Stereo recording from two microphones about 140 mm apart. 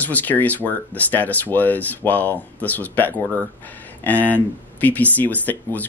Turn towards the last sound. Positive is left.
turn(degrees=10)  # may be behind; listen again after turning